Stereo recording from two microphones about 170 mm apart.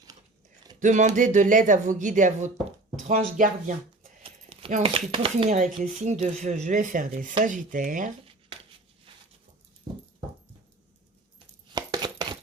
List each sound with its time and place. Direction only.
0.8 s speech: 45° right (ahead or behind)
4.2 s clip-clop: 35° right (ahead or behind)
4.8 s speech: 35° right (ahead or behind); by 8.1 s 50° right (ahead or behind)
9.9 s dog: 25° right (ahead or behind)
11.7 s a sound: 25° right (ahead or behind)